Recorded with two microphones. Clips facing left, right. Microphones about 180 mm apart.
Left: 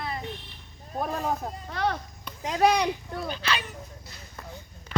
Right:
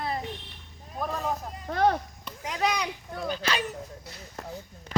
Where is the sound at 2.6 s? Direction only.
60° left (ahead or behind).